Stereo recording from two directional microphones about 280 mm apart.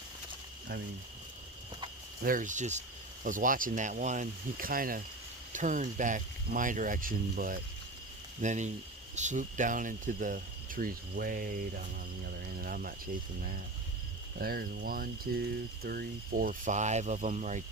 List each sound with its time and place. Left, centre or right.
2.2 s speech: right
12.6 s a sound: right
14.3 s speech: right